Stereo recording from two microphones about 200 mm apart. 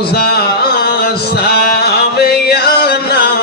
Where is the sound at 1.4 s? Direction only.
50° left (ahead or behind).